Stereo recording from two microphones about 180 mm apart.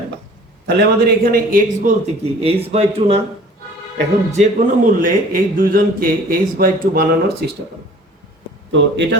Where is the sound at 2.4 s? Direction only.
35° right (ahead or behind).